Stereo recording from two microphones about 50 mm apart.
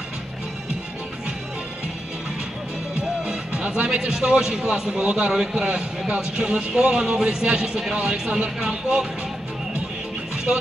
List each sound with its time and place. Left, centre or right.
3.0 s speech: right
10.3 s music: centre